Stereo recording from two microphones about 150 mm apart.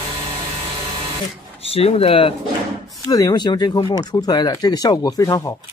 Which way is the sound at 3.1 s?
25° left (ahead or behind).